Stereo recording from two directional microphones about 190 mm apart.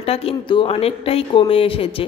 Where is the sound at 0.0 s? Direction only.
30° left (ahead or behind).